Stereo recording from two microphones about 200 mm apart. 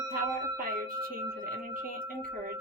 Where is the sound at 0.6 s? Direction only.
45° right (ahead or behind).